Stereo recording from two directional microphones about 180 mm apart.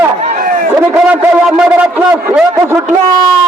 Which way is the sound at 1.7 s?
10° right (ahead or behind).